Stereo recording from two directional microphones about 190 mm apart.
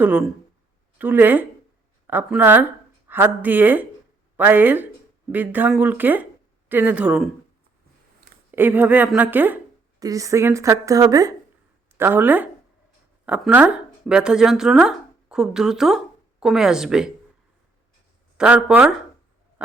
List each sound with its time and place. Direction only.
0.0 s speech: 5° right (ahead or behind)
8.5 s speech: 10° right (ahead or behind)
18.3 s speech: 5° right (ahead or behind)